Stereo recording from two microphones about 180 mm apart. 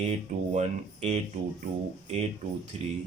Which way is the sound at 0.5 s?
35° right (ahead or behind).